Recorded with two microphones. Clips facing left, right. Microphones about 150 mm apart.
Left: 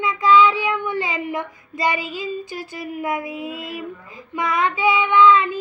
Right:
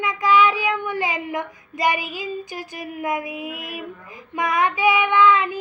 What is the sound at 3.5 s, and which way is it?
Speech, 15° right (ahead or behind).